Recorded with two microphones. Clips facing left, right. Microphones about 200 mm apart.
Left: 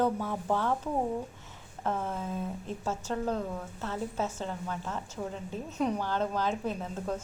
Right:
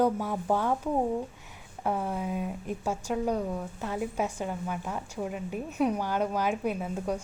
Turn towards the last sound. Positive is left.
turn(degrees=-10)  # may be behind; listen again after turning